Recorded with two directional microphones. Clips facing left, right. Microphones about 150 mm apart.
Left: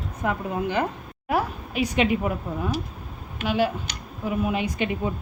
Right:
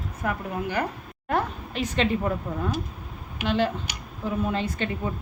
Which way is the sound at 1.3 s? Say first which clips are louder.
Left 1 dB; 10° left (ahead or behind).